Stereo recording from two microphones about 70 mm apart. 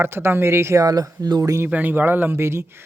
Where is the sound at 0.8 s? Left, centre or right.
Right.